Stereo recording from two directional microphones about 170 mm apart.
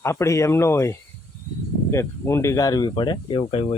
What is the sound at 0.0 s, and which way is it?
Speech, 15° left (ahead or behind).